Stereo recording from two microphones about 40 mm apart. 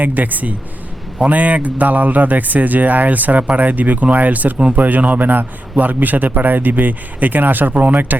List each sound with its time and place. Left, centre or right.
0.0 s a man's voice: right
4.5 s speech: right
4.8 s a man's voice: right